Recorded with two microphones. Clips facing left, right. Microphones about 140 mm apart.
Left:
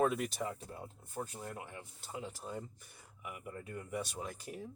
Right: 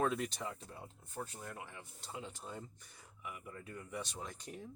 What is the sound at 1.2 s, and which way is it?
Speech, 40° left (ahead or behind).